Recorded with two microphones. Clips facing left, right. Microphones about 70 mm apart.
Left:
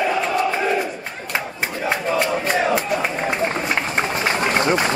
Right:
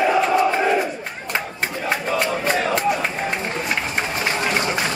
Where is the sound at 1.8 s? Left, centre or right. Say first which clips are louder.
Left 2 dB; centre.